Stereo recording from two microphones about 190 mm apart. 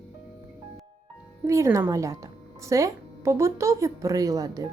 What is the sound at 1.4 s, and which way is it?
Speech, 15° right (ahead or behind).